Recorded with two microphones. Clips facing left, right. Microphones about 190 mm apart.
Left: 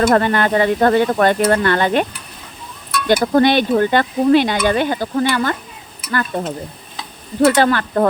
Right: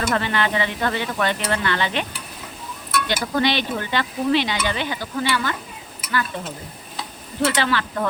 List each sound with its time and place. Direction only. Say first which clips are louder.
0.0 s speech: left 8 dB; 45° left (ahead or behind)
3.1 s speech: left 10 dB; 50° left (ahead or behind)